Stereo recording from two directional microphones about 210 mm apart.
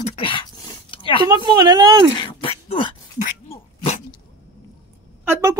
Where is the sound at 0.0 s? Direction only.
25° left (ahead or behind).